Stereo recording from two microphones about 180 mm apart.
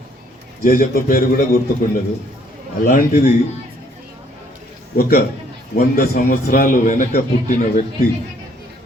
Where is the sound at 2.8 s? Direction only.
55° left (ahead or behind).